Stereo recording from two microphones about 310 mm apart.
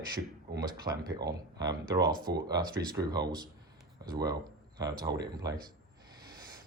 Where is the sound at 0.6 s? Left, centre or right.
Centre.